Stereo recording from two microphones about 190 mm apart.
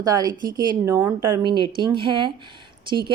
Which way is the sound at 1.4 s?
25° right (ahead or behind).